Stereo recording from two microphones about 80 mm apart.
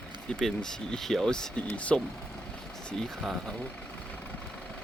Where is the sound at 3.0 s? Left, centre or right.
Centre.